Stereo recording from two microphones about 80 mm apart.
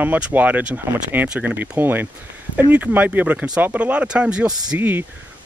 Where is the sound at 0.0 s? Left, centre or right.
Right.